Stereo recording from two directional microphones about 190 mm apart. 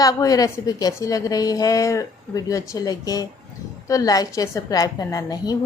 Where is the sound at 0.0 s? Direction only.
20° left (ahead or behind).